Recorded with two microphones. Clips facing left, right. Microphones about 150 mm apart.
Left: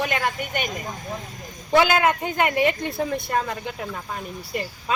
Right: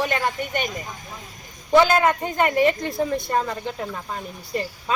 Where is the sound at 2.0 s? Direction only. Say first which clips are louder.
Right 1 dB; 5° left (ahead or behind).